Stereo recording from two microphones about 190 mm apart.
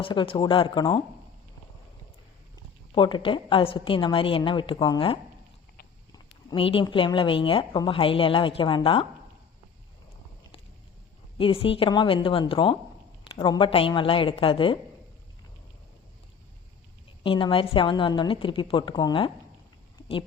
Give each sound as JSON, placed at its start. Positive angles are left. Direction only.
{"t": 0.0, "sound": "speech", "side_deg": 25}
{"t": 2.9, "sound": "speech", "side_deg": 25}
{"t": 11.3, "sound": "speech", "side_deg": 30}
{"t": 17.2, "sound": "speech", "side_deg": 25}